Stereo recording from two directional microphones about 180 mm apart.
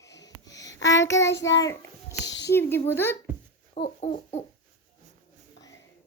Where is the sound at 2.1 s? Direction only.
75° left (ahead or behind).